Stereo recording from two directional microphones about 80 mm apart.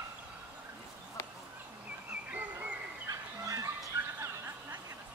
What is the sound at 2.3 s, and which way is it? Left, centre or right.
Bird, right.